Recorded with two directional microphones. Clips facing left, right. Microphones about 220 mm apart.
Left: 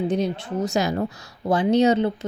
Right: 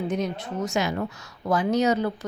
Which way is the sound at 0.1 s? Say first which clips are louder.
Left 4 dB; 35° left (ahead or behind).